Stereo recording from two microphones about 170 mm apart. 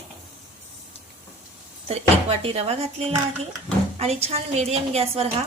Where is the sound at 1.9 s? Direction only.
35° right (ahead or behind).